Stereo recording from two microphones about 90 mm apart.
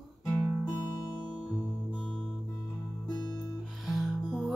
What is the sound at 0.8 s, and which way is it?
Music, 50° left (ahead or behind).